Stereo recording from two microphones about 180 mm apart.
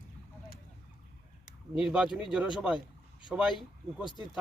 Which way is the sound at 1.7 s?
Centre (ahead or behind).